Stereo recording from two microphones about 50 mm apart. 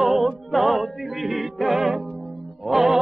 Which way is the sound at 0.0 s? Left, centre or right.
Centre.